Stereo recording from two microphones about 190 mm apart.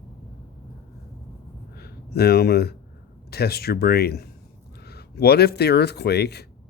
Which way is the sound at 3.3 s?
55° left (ahead or behind).